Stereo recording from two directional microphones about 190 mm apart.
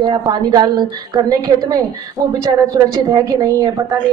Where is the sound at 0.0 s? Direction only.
25° right (ahead or behind).